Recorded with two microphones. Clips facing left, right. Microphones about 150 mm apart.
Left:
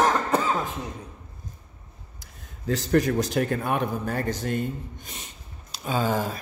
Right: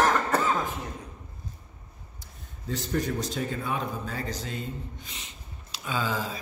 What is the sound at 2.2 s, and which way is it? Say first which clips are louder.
A man's voice: left 8 dB; 90° left.